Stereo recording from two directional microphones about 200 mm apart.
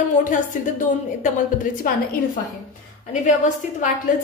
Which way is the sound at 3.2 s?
40° left (ahead or behind).